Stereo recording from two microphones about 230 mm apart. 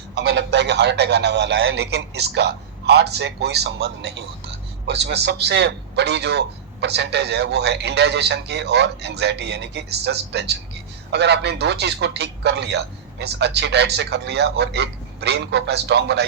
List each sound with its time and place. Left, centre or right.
0.1 s a man's voice: right